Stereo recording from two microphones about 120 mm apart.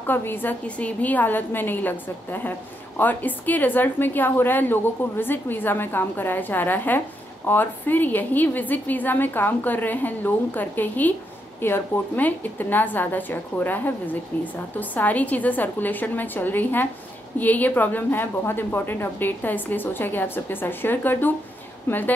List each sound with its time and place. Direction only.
0.0 s a woman's voice: 15° left (ahead or behind)